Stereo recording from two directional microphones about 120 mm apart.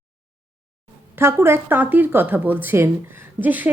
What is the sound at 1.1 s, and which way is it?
Speech, 20° right (ahead or behind).